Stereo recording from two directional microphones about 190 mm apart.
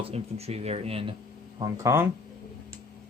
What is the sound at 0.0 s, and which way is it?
Speech, 35° right (ahead or behind).